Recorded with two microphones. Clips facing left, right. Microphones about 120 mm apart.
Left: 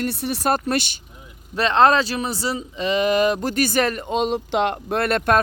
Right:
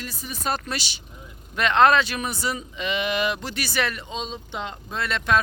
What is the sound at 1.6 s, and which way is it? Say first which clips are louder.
Speech: left 2 dB; 30° left (ahead or behind).